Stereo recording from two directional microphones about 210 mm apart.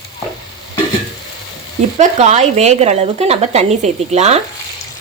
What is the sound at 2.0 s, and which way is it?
A woman's voice, 35° right (ahead or behind).